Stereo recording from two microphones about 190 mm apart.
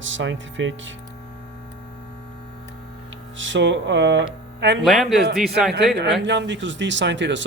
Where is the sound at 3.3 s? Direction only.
80° right.